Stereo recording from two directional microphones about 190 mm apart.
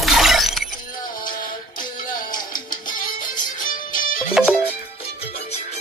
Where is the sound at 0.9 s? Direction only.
45° left (ahead or behind).